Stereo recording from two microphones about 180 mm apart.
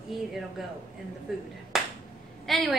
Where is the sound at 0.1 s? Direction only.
Centre (ahead or behind).